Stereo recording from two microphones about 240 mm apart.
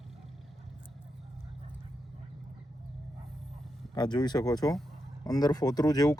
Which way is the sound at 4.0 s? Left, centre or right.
Centre.